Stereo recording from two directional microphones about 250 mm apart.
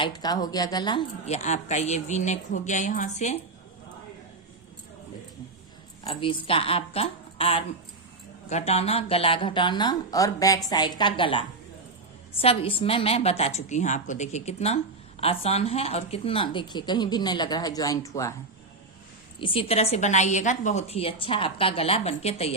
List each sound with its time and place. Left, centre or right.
0.0 s a woman's voice: centre
6.1 s a woman's voice: left
19.4 s a woman's voice: left